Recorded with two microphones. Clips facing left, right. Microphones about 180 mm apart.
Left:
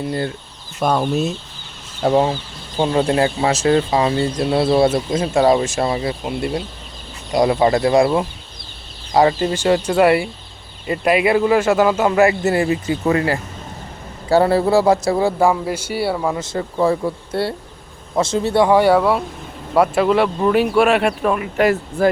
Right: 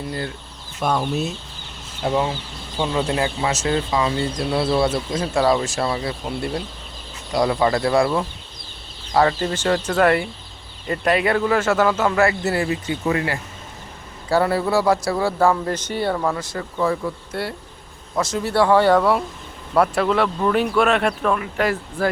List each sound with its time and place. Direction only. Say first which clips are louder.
0.8 s speech: left 4 dB; 50° left (ahead or behind)
2.7 s a man's voice: left 5 dB; 40° left (ahead or behind); by 16.4 s 10° left (ahead or behind)
16.4 s a man's voice: left 5 dB; 25° left (ahead or behind)